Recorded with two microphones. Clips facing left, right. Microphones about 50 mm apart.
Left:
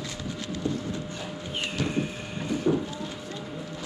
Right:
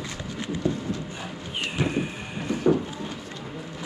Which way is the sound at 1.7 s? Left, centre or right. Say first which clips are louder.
Right 3 dB; centre.